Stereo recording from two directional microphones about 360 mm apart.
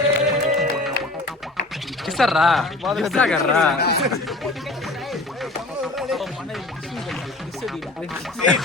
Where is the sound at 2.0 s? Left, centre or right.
Centre.